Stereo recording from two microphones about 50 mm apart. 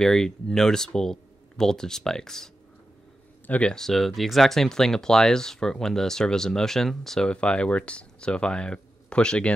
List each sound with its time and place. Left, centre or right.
0.0 s speech: centre
3.4 s speech: left
3.7 s speech: centre
7.2 s speech: left